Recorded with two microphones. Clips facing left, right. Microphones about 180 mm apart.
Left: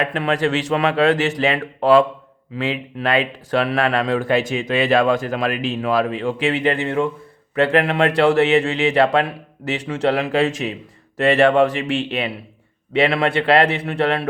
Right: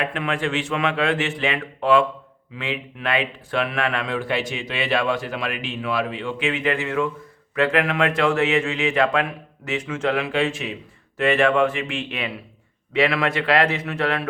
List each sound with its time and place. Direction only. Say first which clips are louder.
0.0 s speech: left 5 dB; 35° left (ahead or behind)